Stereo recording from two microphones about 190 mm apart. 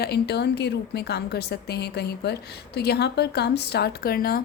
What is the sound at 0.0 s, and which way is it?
A woman's voice, 60° left (ahead or behind).